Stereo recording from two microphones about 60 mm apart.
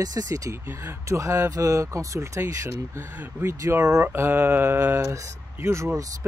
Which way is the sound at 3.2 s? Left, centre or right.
Right.